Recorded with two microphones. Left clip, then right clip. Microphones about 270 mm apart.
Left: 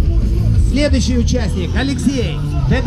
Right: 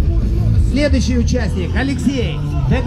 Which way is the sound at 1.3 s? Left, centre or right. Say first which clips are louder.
Even; left.